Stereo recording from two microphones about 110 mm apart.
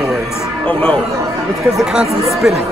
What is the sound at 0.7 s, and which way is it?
Speech, 20° left (ahead or behind).